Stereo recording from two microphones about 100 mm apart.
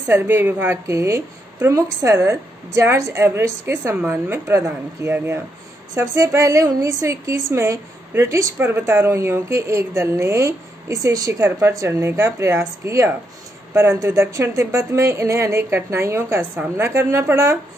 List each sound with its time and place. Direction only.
0.1 s a woman's voice: 20° right (ahead or behind)